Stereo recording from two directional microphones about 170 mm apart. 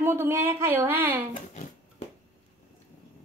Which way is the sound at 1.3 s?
45° left (ahead or behind).